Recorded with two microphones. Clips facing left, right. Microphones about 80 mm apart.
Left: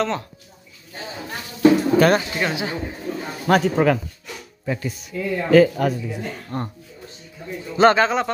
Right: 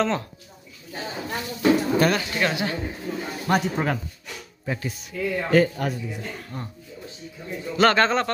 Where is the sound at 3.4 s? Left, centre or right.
Left.